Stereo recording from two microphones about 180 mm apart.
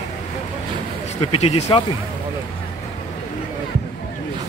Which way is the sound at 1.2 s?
35° left (ahead or behind).